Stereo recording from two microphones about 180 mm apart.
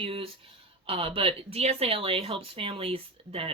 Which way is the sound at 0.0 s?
30° right (ahead or behind).